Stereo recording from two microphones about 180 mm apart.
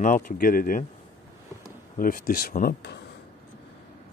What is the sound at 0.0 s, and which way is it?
Speech, 50° left (ahead or behind).